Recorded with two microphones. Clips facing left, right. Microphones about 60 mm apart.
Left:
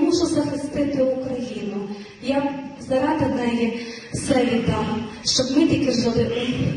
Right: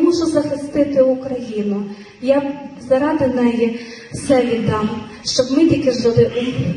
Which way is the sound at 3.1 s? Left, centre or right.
Right.